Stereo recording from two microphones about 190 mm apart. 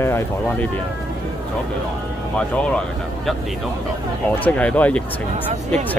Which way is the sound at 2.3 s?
5° left (ahead or behind).